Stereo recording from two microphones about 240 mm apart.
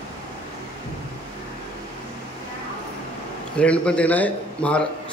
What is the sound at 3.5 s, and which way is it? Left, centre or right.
A man's voice, centre.